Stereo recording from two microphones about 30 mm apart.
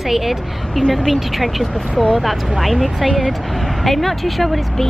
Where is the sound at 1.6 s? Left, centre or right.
Centre.